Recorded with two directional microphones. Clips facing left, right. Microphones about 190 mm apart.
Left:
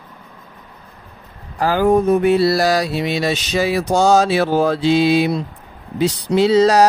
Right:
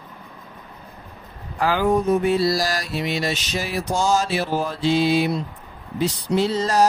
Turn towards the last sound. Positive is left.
turn(degrees=80)